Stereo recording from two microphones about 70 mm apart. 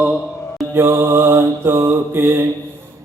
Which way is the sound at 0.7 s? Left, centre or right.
Right.